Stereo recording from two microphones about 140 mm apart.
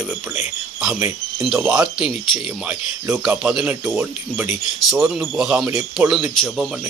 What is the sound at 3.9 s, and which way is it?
Speech, 15° right (ahead or behind).